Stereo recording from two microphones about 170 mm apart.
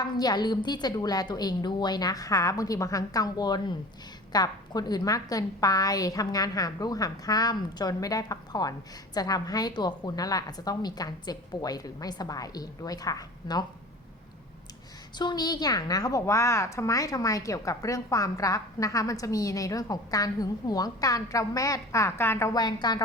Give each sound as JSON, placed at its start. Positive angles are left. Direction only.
{"t": 0.0, "sound": "a woman's voice", "side_deg": 25}
{"t": 15.2, "sound": "a woman's voice", "side_deg": 25}